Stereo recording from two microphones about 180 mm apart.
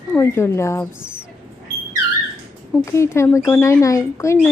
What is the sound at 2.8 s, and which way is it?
Speech, 15° left (ahead or behind).